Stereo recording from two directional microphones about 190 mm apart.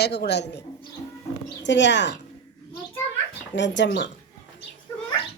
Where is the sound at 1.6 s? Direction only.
70° left (ahead or behind).